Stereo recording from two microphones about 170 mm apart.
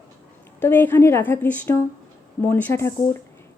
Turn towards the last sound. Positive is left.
turn(degrees=15)  # may be behind; listen again after turning